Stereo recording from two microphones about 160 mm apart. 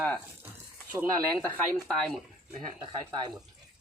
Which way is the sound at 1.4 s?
10° left (ahead or behind).